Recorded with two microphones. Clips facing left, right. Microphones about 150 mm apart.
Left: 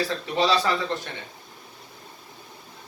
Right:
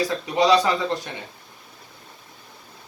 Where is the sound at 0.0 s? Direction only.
15° right (ahead or behind).